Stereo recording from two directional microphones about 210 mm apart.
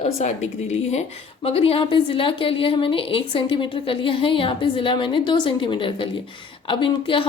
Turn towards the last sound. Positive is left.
turn(degrees=25)  # may be behind; listen again after turning